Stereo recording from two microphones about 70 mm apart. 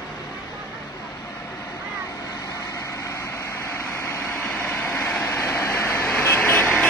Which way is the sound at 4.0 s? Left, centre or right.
Left.